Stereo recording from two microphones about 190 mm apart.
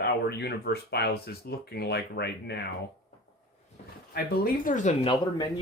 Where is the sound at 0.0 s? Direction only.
60° left (ahead or behind).